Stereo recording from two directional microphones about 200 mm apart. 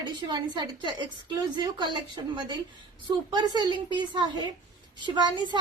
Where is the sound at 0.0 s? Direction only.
20° right (ahead or behind).